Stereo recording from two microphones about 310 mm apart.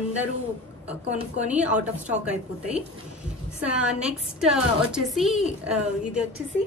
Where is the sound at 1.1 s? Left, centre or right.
Right.